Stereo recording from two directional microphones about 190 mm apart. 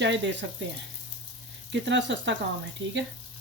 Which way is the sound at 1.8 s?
70° right (ahead or behind).